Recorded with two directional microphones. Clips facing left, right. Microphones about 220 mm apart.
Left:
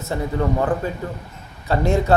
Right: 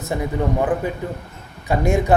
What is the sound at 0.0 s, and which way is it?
Speech, 15° right (ahead or behind).